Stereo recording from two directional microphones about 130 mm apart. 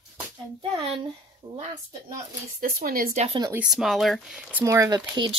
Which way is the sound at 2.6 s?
90° right.